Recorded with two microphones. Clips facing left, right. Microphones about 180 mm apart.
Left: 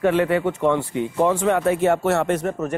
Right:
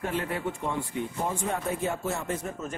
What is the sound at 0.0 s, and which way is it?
Speech, 80° left.